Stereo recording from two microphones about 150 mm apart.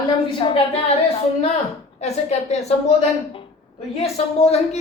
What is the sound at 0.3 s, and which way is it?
A woman's voice, 35° left (ahead or behind).